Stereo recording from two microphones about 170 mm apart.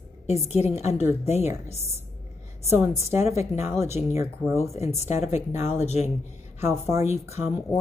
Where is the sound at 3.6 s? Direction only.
15° right (ahead or behind).